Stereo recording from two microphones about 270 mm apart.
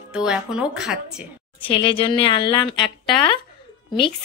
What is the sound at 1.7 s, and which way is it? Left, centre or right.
A woman's voice, centre.